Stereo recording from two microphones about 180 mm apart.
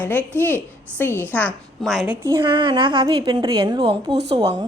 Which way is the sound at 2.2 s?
20° right (ahead or behind).